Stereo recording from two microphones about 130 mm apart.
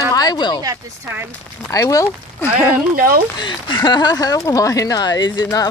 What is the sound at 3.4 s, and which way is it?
Speech, 35° left (ahead or behind).